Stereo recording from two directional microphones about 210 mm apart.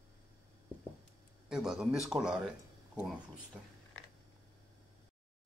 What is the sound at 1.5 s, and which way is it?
Speech, 5° right (ahead or behind).